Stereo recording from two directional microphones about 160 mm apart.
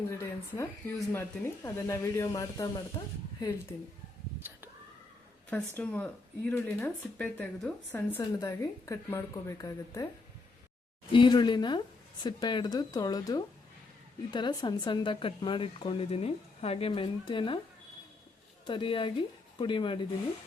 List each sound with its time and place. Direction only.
0.1 s a woman's voice: 15° left (ahead or behind)
5.5 s a woman's voice: 10° left (ahead or behind)
11.1 s a woman's voice: 30° left (ahead or behind)
18.6 s speech: 30° left (ahead or behind)